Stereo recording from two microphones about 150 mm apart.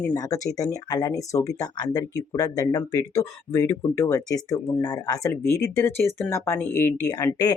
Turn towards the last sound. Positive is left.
turn(degrees=25)  # may be behind; listen again after turning